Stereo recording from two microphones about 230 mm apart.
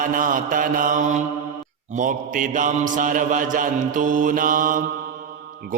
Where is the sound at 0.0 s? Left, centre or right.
Right.